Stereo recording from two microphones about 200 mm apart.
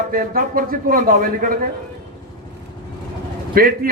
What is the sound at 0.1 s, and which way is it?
A man's voice, 45° right (ahead or behind).